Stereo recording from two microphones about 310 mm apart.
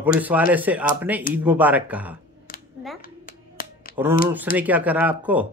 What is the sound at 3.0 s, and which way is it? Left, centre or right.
Finger snapping, left.